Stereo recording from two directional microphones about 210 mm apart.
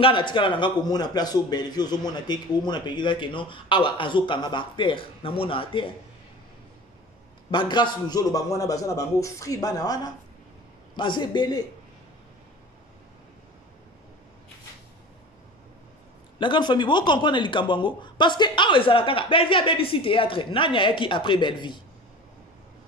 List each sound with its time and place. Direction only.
0.0 s a man's voice: 25° left (ahead or behind)
7.5 s a man's voice: 20° left (ahead or behind)
16.3 s a man's voice: 20° left (ahead or behind)